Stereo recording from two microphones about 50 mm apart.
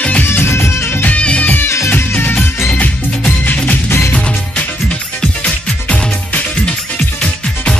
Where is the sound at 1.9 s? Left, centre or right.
Left.